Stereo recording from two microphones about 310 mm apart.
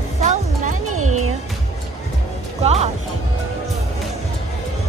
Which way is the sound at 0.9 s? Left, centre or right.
Right.